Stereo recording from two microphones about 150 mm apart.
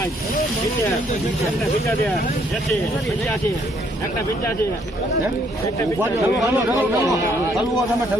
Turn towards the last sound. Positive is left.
turn(degrees=-25)  # may be behind; listen again after turning